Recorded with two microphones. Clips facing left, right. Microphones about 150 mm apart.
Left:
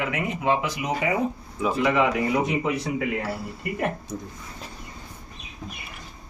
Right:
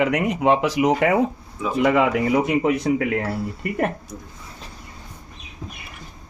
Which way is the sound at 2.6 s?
60° right (ahead or behind).